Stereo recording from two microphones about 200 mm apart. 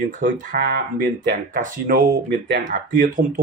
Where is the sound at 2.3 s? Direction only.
65° right (ahead or behind).